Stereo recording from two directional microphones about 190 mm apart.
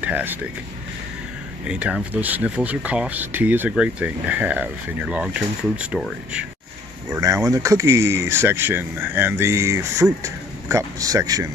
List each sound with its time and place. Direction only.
0.0 s speech: 10° right (ahead or behind)
1.6 s speech: 5° right (ahead or behind)
7.2 s speech: 15° right (ahead or behind)